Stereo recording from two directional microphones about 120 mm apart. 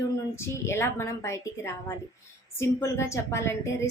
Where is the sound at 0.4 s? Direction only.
25° left (ahead or behind).